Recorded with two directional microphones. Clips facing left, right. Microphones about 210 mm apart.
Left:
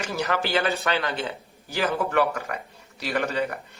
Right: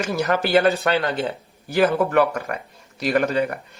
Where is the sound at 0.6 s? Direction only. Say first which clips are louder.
Right 6 dB; 35° right (ahead or behind).